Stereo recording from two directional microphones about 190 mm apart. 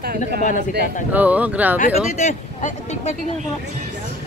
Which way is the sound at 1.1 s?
10° right (ahead or behind).